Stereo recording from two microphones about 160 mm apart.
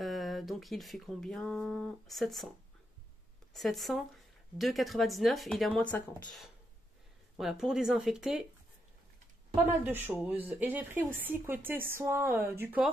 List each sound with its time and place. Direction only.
0.0 s speech: centre (ahead or behind)
3.5 s speech: centre (ahead or behind)
7.3 s speech: 5° right (ahead or behind)
9.7 s speech: 15° right (ahead or behind)